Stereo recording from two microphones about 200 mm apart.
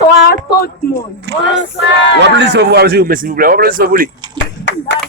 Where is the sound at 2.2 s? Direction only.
60° right (ahead or behind).